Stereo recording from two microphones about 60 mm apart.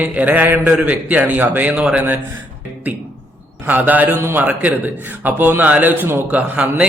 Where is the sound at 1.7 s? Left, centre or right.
Centre.